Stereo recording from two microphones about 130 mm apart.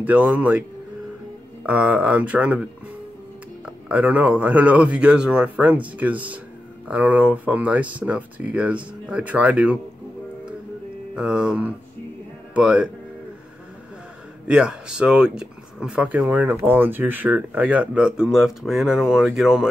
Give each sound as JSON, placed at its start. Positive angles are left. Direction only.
{"t": 0.0, "sound": "speech", "side_deg": -10}
{"t": 1.7, "sound": "speech", "side_deg": -10}
{"t": 11.1, "sound": "speech", "side_deg": -5}
{"t": 14.5, "sound": "speech", "side_deg": -5}